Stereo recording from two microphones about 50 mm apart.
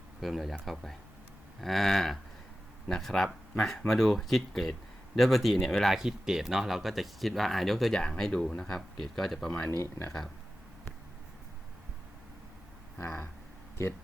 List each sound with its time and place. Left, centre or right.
0.2 s speech: centre
6.0 s speech: centre
7.9 s speech: centre
9.7 s speech: left